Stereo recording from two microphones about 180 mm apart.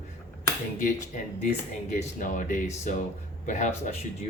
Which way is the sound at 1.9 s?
45° left (ahead or behind).